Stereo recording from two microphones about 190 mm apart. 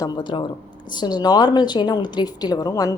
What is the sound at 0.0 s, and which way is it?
A woman's voice, 20° left (ahead or behind).